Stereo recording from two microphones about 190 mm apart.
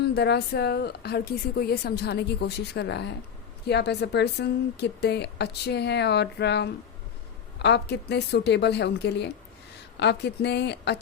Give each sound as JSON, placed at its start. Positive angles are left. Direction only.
{"t": 0.0, "sound": "a woman's voice", "side_deg": 60}